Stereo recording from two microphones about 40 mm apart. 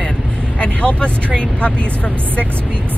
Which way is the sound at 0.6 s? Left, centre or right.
Left.